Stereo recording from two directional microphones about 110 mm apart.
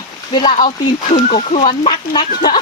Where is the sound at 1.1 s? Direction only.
90° left.